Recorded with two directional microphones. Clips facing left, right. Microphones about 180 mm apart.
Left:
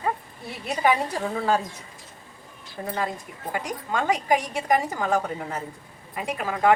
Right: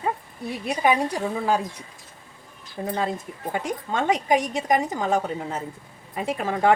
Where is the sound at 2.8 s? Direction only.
20° right (ahead or behind).